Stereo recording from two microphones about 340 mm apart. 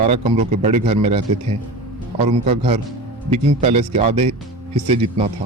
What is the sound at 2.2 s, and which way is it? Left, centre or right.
Speech, centre.